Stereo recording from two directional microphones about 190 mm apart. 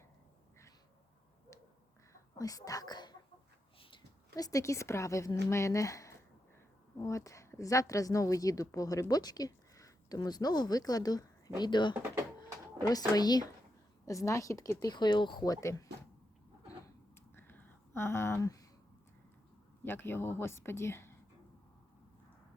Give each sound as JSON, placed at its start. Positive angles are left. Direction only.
{"t": 2.4, "sound": "a woman's voice", "side_deg": 20}
{"t": 4.4, "sound": "a woman's voice", "side_deg": 20}
{"t": 17.3, "sound": "a sound", "side_deg": 10}
{"t": 19.8, "sound": "speech", "side_deg": 10}